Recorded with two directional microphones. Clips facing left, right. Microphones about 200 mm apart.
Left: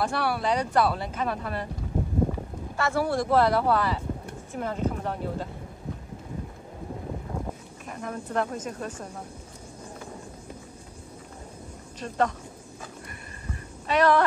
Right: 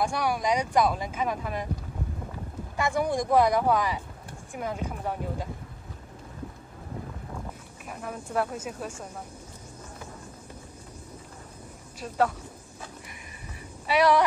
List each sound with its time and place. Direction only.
0.0 s speech: 15° right (ahead or behind)
2.8 s speech: 15° right (ahead or behind)
7.9 s speech: 5° right (ahead or behind)
12.0 s speech: 5° right (ahead or behind)
13.1 s a sound: 10° right (ahead or behind)